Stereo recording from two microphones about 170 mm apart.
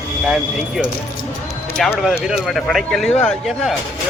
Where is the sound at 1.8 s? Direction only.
Centre (ahead or behind).